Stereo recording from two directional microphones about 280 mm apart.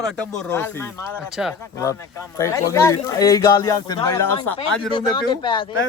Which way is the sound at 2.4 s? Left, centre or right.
Centre.